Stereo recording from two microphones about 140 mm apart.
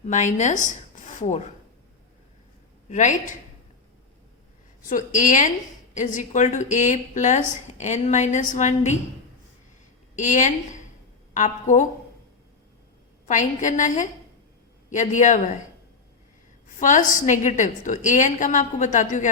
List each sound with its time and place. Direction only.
0.0 s speech: 60° left (ahead or behind)
2.9 s a woman's voice: 60° left (ahead or behind)
4.9 s a woman's voice: 65° left (ahead or behind)
10.2 s a woman's voice: 60° left (ahead or behind)
13.2 s a woman's voice: 65° left (ahead or behind)
16.8 s a woman's voice: 65° left (ahead or behind)